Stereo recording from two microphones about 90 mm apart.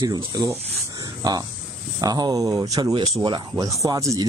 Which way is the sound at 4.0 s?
35° right (ahead or behind).